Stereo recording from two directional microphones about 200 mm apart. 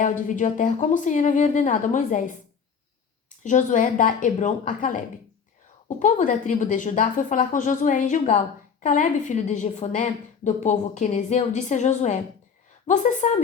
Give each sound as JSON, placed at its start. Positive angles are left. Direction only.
{"t": 0.0, "sound": "a woman's voice", "side_deg": 40}
{"t": 3.4, "sound": "a woman's voice", "side_deg": 40}